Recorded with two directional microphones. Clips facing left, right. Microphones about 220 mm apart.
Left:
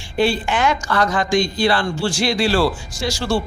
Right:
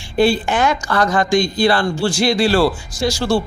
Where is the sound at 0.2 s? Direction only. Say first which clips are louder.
Right 3 dB; 40° right (ahead or behind).